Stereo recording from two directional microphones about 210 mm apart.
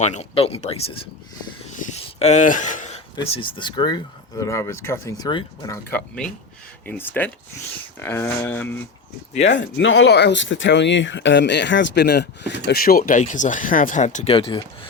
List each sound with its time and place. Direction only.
0.0 s speech: 30° left (ahead or behind)
1.9 s a sound: 30° left (ahead or behind)
3.2 s speech: 25° left (ahead or behind); by 8.7 s 10° left (ahead or behind)
9.4 s speech: 60° left (ahead or behind); by 14.6 s 25° left (ahead or behind)